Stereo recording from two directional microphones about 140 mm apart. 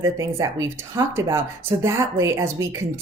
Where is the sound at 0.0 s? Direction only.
25° right (ahead or behind).